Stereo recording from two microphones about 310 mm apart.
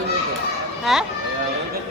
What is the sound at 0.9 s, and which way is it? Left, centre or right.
Speech, centre.